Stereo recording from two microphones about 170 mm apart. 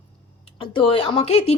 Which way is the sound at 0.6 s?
30° left (ahead or behind).